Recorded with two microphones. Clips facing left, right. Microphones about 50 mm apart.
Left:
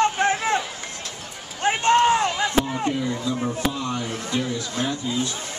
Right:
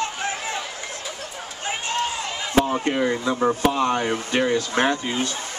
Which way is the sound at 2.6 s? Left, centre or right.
Right.